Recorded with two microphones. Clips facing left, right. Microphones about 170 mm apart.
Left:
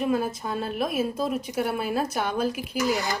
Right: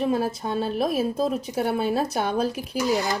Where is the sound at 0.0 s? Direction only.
30° right (ahead or behind).